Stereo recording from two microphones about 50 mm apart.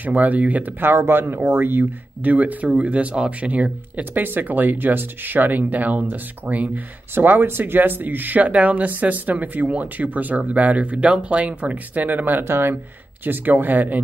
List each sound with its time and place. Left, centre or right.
0.0 s speech: right
4.2 s speech: right
7.2 s speech: right
12.4 s speech: right
13.2 s speech: right